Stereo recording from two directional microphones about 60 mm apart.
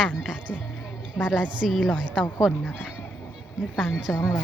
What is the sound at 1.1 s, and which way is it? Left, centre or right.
A woman's voice, centre.